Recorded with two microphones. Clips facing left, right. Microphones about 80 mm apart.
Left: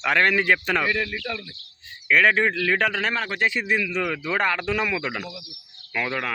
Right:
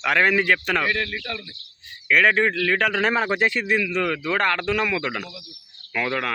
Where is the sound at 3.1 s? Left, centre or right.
Centre.